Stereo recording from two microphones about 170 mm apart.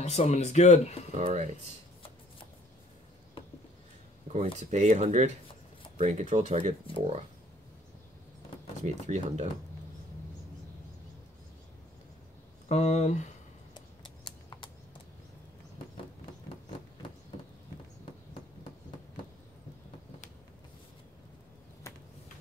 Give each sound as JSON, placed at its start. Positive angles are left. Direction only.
{"t": 0.0, "sound": "speech", "side_deg": 40}
{"t": 1.2, "sound": "speech", "side_deg": -45}
{"t": 4.3, "sound": "speech", "side_deg": -45}
{"t": 8.8, "sound": "speech", "side_deg": -40}
{"t": 12.6, "sound": "speech", "side_deg": 40}
{"t": 13.7, "sound": "a sound", "side_deg": 25}